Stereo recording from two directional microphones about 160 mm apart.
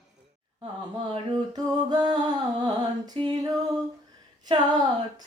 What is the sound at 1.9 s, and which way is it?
Music, 30° right (ahead or behind).